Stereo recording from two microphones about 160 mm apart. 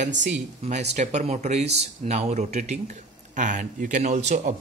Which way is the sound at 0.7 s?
45° right (ahead or behind).